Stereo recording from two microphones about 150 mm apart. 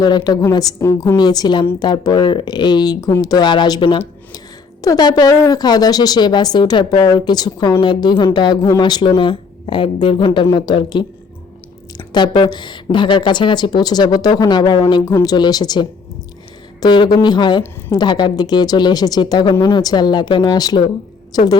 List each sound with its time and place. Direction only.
0.0 s a woman's voice: 25° left (ahead or behind)